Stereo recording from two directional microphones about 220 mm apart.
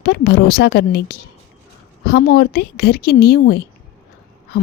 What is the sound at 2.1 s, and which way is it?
A woman's voice, 45° left (ahead or behind).